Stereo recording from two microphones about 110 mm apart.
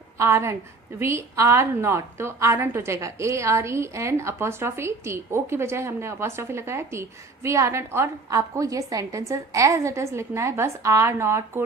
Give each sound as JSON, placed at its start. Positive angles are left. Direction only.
{"t": 0.2, "sound": "a woman's voice", "side_deg": -25}